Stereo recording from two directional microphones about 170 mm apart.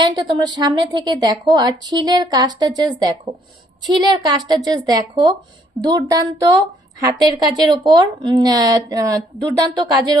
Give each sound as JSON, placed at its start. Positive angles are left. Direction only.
{"t": 0.0, "sound": "a woman's voice", "side_deg": -25}